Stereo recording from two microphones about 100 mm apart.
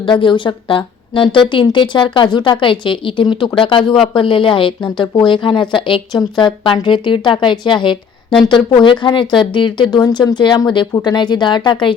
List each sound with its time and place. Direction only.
0.0 s a woman's voice: 55° left (ahead or behind)
10.0 s a woman's voice: 40° left (ahead or behind)